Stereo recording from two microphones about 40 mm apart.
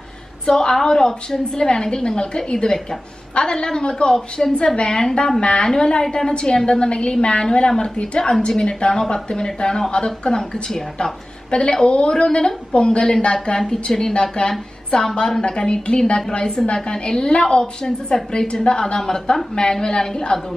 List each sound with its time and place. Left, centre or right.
0.5 s a woman's voice: centre